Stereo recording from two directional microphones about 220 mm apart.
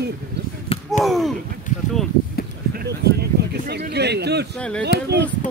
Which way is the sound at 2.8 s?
45° right (ahead or behind).